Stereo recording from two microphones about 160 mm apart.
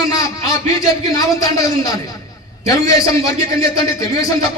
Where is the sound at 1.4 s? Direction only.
20° left (ahead or behind).